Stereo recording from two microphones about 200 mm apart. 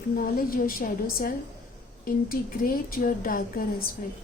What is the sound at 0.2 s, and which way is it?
Speech, 45° left (ahead or behind).